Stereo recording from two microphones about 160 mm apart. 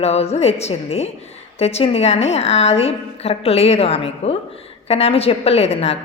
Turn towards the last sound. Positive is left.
turn(degrees=40)  # may be behind; listen again after turning